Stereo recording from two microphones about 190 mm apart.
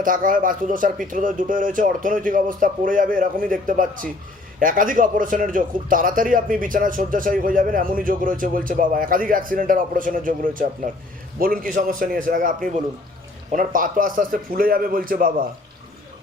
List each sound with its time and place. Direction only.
0.0 s a man's voice: 45° right (ahead or behind)